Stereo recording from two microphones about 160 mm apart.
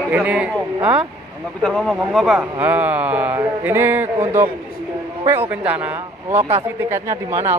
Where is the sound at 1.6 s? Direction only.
5° left (ahead or behind).